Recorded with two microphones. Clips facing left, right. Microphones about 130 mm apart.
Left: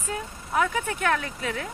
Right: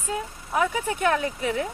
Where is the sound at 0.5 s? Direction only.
5° right (ahead or behind).